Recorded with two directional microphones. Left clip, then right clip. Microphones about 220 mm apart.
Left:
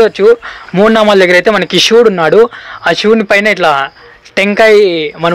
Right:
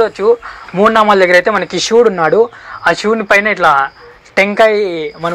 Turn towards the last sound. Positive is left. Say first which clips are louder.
# left 7 dB
turn(degrees=30)  # may be behind; listen again after turning